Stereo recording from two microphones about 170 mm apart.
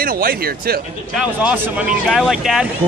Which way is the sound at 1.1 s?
5° right (ahead or behind).